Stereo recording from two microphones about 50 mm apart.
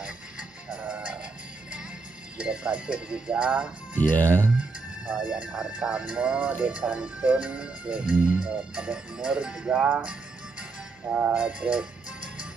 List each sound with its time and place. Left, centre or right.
0.7 s music: right
2.3 s speech: right
4.1 s speech: left
4.6 s speech: right
11.3 s speech: right